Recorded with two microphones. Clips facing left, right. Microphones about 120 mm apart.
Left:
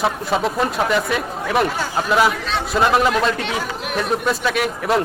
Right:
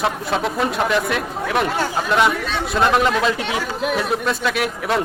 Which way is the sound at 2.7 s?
Centre (ahead or behind).